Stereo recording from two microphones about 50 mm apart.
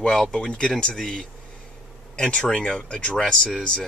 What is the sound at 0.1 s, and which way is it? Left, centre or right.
Speech, centre.